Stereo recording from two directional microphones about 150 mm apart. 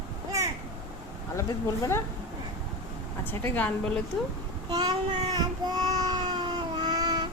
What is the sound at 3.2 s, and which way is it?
Speech, 15° left (ahead or behind).